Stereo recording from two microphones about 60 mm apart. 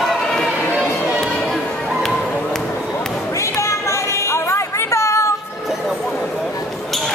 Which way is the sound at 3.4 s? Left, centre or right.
Left.